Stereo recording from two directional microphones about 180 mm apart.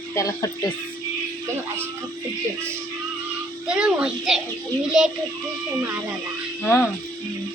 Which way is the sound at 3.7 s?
5° right (ahead or behind).